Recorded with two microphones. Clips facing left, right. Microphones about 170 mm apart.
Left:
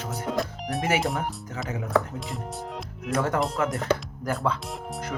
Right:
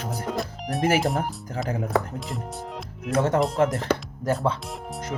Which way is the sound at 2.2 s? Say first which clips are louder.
Right 1 dB; centre (ahead or behind).